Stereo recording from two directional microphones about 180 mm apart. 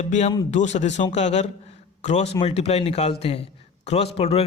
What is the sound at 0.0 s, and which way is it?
A man's voice, 40° left (ahead or behind).